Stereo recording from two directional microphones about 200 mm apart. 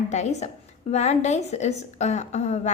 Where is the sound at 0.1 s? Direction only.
35° left (ahead or behind).